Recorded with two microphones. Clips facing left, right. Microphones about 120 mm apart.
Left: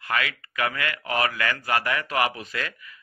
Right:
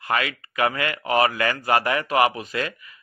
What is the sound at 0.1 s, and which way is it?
Speech, 25° right (ahead or behind).